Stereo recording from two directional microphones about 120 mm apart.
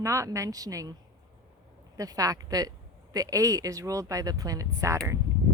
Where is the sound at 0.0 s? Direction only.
25° right (ahead or behind).